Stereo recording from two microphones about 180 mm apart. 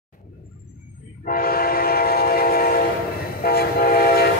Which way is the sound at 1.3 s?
55° left (ahead or behind).